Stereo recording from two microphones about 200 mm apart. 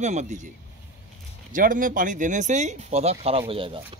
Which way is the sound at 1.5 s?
40° right (ahead or behind).